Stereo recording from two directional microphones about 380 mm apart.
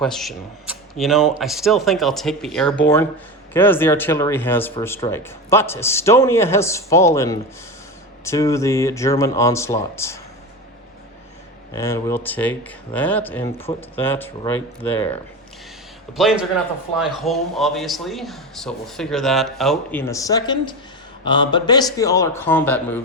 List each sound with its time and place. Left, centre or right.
0.0 s a man's voice: centre
11.7 s a man's voice: centre